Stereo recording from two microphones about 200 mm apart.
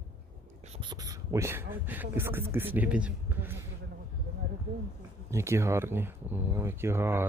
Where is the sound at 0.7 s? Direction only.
25° right (ahead or behind).